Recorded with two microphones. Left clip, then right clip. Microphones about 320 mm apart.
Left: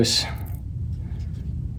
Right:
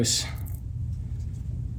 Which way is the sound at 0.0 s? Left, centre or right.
Left.